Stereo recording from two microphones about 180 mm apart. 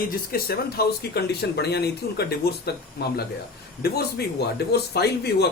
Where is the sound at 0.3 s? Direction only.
55° left (ahead or behind).